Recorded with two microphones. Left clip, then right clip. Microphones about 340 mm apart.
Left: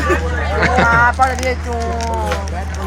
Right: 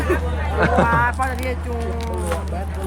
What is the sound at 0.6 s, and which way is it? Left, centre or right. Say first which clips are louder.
Speech: left 3 dB; centre.